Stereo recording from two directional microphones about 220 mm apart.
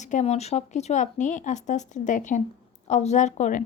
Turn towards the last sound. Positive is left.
turn(degrees=35)  # may be behind; listen again after turning